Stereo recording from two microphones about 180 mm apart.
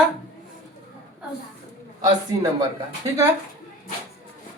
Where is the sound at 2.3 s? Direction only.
20° right (ahead or behind).